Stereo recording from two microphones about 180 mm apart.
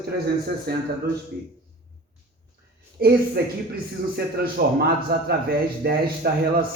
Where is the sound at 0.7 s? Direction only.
60° right (ahead or behind).